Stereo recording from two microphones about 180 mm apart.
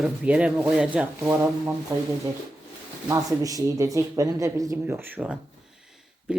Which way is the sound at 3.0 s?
20° right (ahead or behind).